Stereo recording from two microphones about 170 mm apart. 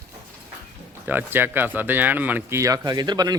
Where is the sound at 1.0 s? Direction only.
10° right (ahead or behind).